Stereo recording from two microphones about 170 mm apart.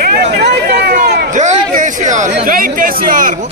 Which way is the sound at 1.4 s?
50° right (ahead or behind).